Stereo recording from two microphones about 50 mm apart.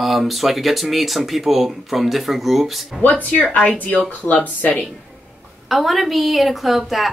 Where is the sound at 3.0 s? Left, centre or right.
Left.